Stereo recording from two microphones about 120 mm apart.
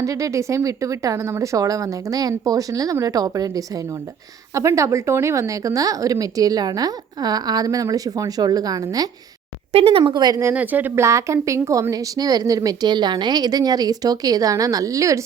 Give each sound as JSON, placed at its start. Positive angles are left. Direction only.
{"t": 0.0, "sound": "a woman's voice", "side_deg": -25}
{"t": 9.7, "sound": "speech", "side_deg": -50}
{"t": 10.0, "sound": "a woman's voice", "side_deg": -35}
{"t": 10.5, "sound": "speech", "side_deg": -15}